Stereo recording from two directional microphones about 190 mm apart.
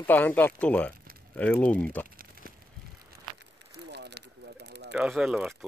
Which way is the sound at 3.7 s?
65° right (ahead or behind).